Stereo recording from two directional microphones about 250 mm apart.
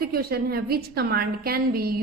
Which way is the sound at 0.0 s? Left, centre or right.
Right.